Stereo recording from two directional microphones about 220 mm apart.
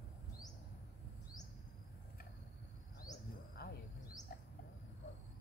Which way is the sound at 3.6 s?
50° left (ahead or behind).